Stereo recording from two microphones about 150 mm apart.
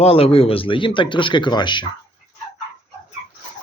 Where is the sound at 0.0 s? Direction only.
40° left (ahead or behind).